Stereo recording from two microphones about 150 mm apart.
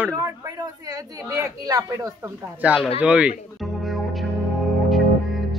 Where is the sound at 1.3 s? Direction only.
25° right (ahead or behind).